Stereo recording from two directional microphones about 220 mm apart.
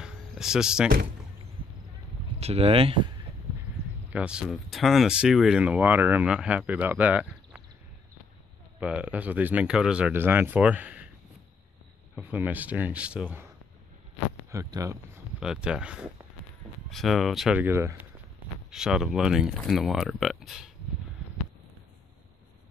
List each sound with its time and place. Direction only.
0.0 s a sound: 5° right (ahead or behind)
2.4 s speech: 25° right (ahead or behind)
4.1 s speech: 5° right (ahead or behind)
8.7 s speech: 5° right (ahead or behind)
12.2 s speech: 5° right (ahead or behind)
14.5 s speech: 15° right (ahead or behind)
15.4 s speech: 5° right (ahead or behind)